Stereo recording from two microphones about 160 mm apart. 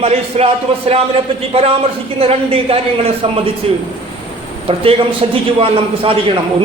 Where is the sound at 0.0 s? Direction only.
40° right (ahead or behind).